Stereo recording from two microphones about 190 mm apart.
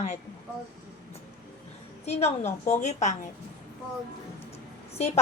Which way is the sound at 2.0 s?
35° left (ahead or behind).